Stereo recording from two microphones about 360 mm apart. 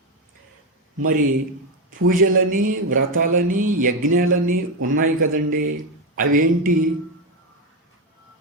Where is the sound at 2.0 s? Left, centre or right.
Right.